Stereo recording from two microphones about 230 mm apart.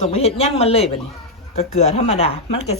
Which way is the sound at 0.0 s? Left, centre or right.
Left.